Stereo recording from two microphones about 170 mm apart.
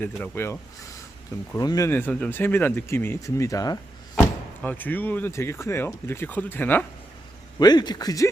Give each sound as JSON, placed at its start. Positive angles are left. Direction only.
{"t": 0.0, "sound": "speech", "side_deg": 15}
{"t": 4.6, "sound": "speech", "side_deg": 10}
{"t": 7.6, "sound": "speech", "side_deg": 25}